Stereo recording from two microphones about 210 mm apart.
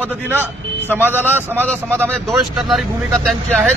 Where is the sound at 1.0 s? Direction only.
10° right (ahead or behind).